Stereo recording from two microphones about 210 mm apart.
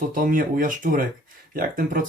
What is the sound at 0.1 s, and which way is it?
Speech, 40° right (ahead or behind).